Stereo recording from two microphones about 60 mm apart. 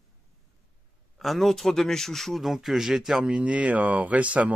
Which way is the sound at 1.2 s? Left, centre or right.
Centre.